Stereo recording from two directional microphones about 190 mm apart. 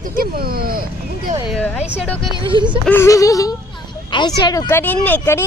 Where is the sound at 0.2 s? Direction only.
50° right (ahead or behind).